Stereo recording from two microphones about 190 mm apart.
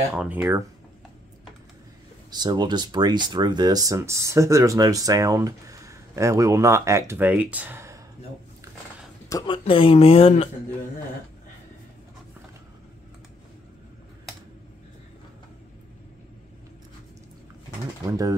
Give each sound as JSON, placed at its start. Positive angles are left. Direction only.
{"t": 0.1, "sound": "speech", "side_deg": -5}
{"t": 2.3, "sound": "speech", "side_deg": -20}
{"t": 9.3, "sound": "speech", "side_deg": 25}